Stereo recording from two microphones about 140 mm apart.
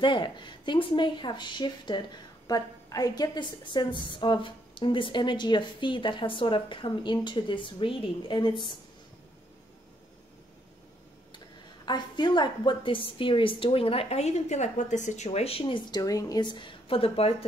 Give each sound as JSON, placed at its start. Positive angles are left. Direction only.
{"t": 0.0, "sound": "a woman's voice", "side_deg": 35}
{"t": 11.3, "sound": "a woman's voice", "side_deg": 30}